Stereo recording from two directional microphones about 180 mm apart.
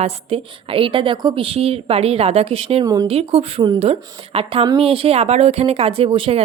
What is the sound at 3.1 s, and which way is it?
A woman's voice, 35° right (ahead or behind).